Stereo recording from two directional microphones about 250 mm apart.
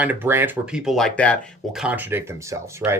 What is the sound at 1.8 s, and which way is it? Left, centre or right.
Speech, centre.